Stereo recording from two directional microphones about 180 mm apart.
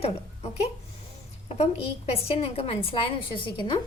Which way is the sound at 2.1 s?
35° left (ahead or behind).